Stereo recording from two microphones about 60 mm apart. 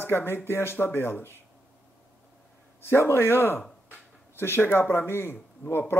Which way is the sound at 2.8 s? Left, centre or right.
Left.